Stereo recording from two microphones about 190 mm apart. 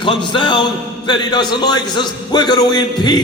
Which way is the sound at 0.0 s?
25° left (ahead or behind).